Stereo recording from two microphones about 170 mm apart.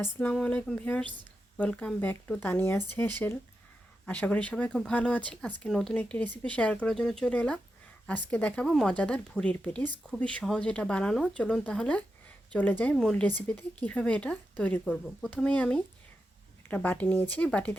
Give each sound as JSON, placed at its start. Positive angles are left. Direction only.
{"t": 0.0, "sound": "speech", "side_deg": 10}